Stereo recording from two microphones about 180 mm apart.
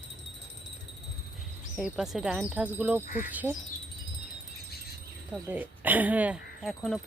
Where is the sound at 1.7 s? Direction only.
5° right (ahead or behind).